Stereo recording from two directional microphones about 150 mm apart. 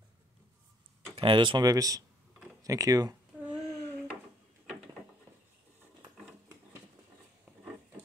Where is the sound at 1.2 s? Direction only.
35° right (ahead or behind).